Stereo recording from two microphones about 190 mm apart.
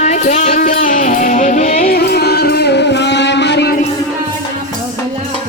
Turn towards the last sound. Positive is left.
turn(degrees=60)  # may be behind; listen again after turning